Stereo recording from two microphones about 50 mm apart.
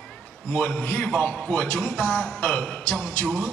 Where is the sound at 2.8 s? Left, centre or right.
Left.